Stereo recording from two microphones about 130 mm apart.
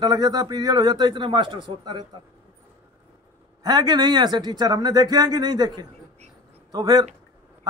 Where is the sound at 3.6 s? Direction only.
30° right (ahead or behind).